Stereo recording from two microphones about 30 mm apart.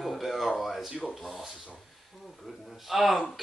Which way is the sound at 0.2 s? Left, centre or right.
Centre.